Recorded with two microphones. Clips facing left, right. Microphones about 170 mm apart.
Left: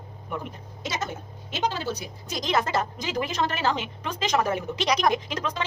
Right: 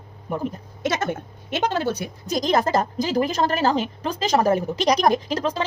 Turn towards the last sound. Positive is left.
turn(degrees=-35)  # may be behind; listen again after turning